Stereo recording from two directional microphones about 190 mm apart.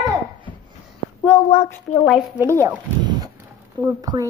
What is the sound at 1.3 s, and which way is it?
Speech, 10° left (ahead or behind).